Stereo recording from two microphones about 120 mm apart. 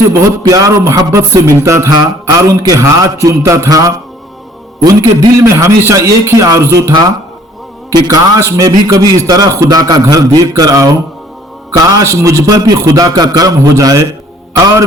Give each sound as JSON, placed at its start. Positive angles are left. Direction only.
{"t": 0.1, "sound": "a man's voice", "side_deg": -25}
{"t": 8.0, "sound": "a man's voice", "side_deg": -25}